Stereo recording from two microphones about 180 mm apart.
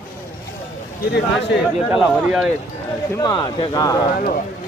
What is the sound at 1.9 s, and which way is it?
Speech, 5° right (ahead or behind).